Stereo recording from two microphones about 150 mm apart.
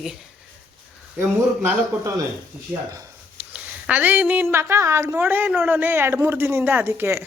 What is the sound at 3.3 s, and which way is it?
Speech, 10° right (ahead or behind).